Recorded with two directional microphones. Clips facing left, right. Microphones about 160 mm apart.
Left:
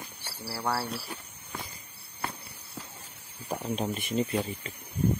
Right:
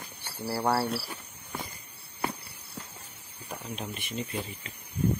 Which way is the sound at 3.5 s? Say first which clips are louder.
Left 7 dB; 35° left (ahead or behind).